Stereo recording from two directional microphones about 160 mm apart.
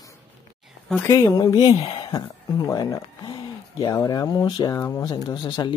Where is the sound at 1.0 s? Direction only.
25° left (ahead or behind).